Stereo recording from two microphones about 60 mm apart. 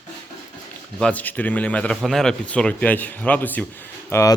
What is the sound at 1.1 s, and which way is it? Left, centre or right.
Speech, left.